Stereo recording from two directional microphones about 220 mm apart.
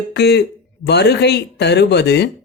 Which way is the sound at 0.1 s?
50° left (ahead or behind).